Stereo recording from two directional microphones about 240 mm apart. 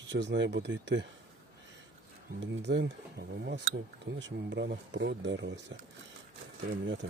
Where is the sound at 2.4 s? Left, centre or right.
Right.